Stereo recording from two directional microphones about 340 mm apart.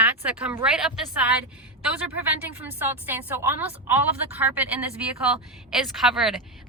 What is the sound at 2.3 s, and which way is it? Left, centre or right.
A woman's voice, centre.